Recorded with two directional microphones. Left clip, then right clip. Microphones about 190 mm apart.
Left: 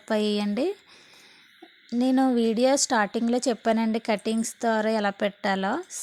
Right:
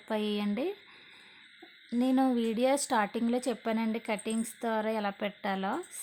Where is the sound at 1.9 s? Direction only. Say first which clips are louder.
Left 5 dB; 25° left (ahead or behind).